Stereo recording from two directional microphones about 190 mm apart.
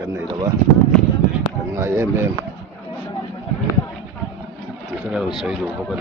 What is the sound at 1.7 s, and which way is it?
Speech, 15° right (ahead or behind).